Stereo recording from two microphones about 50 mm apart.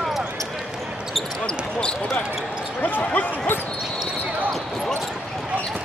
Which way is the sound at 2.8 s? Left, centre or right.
Left.